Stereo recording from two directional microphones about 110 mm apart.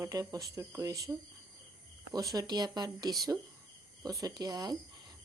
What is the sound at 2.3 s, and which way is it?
Speech, 40° right (ahead or behind).